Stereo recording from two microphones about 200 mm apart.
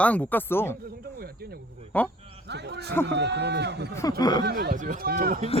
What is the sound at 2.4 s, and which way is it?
Speech, 55° right (ahead or behind).